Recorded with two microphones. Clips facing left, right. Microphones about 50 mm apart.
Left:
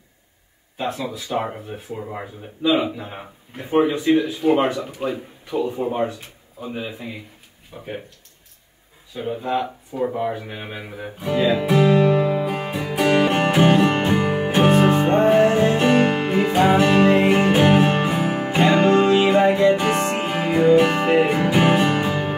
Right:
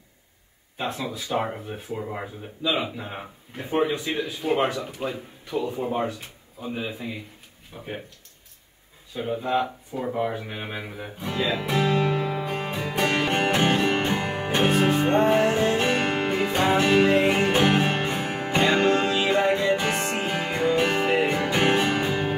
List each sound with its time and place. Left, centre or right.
0.7 s speech: centre
3.7 s speech: centre
4.1 s speech: centre
7.7 s speech: centre
9.1 s a sound: centre
17.2 s music: centre